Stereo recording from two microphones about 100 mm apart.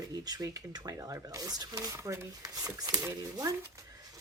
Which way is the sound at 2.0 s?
25° right (ahead or behind).